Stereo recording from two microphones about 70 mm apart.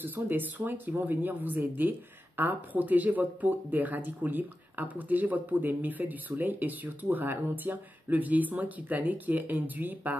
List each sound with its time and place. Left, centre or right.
0.0 s speech: right